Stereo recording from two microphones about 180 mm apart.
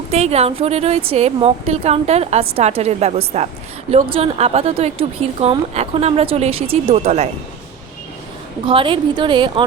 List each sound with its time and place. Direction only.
0.1 s a woman's voice: 35° right (ahead or behind)
8.6 s a woman's voice: 30° right (ahead or behind)